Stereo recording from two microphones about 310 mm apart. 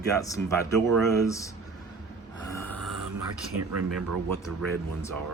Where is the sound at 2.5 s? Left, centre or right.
Centre.